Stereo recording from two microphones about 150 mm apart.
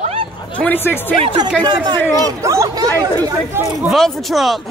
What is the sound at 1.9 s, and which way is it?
Speech, 20° left (ahead or behind).